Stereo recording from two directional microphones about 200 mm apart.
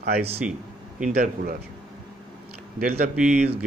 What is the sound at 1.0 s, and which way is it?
Speech, 45° right (ahead or behind).